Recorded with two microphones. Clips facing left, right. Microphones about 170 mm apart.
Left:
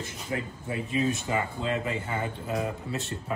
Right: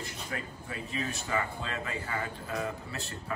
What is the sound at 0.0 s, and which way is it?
Speech, 20° left (ahead or behind).